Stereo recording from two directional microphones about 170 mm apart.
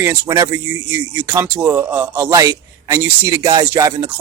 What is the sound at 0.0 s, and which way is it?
Speech, 15° right (ahead or behind).